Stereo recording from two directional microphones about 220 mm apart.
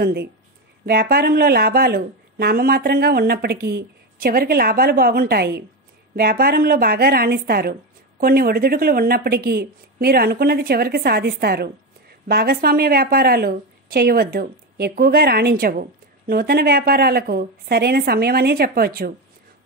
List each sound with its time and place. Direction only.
0.0 s a woman's voice: 45° right (ahead or behind)